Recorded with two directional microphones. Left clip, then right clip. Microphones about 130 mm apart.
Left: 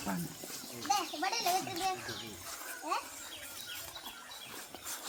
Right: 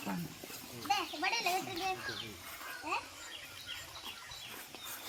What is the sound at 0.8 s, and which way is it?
A child's voice, 20° left (ahead or behind).